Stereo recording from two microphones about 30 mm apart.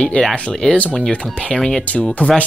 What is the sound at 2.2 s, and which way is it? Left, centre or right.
Speech, left.